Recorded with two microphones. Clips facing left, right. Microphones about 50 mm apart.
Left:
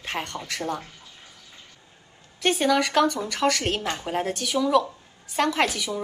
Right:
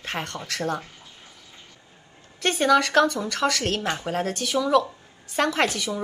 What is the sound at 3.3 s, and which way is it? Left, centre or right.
Speech, left.